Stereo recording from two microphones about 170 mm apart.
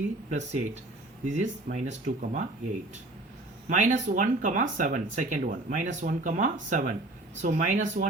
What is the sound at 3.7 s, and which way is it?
Speech, 45° right (ahead or behind).